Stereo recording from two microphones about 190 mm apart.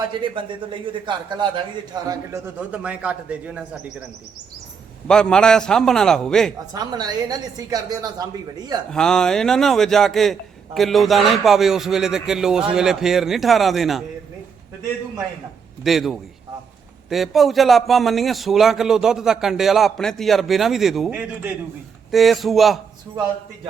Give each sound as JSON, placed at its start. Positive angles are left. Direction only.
{"t": 0.2, "sound": "a woman's voice", "side_deg": -25}
{"t": 2.6, "sound": "a man's voice", "side_deg": -5}
{"t": 5.0, "sound": "a man's voice", "side_deg": 5}
{"t": 6.7, "sound": "a woman's voice", "side_deg": -20}
{"t": 8.9, "sound": "a man's voice", "side_deg": 5}
{"t": 15.8, "sound": "a man's voice", "side_deg": 0}